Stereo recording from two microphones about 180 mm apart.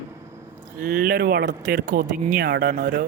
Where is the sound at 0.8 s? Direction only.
50° right (ahead or behind).